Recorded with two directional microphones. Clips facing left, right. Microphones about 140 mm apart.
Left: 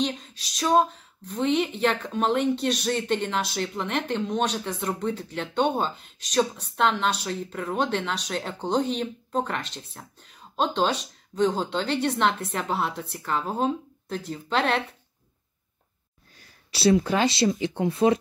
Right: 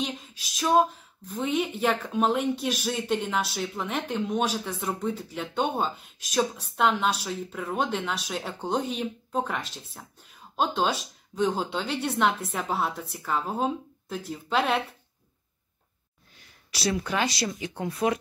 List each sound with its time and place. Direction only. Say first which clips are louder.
0.4 s a sound: right 1 dB; 5° right (ahead or behind)
1.3 s speech: left 3 dB; 5° right (ahead or behind)
16.7 s speech: left 7 dB; 30° left (ahead or behind)